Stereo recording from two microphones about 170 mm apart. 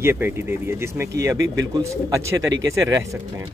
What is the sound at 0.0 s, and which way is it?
Speech, 15° right (ahead or behind).